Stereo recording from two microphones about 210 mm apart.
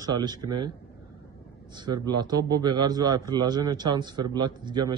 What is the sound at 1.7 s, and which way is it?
A man's voice, 20° right (ahead or behind).